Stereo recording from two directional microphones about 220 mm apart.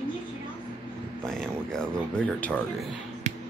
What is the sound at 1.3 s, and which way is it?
Music, 5° left (ahead or behind).